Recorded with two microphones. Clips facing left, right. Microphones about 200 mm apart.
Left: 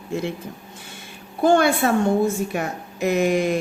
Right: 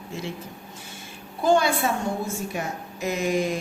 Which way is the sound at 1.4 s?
60° left (ahead or behind).